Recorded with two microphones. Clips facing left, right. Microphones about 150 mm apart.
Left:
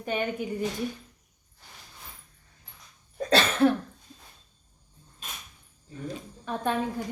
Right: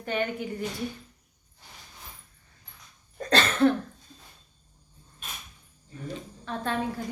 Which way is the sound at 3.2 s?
5° left (ahead or behind).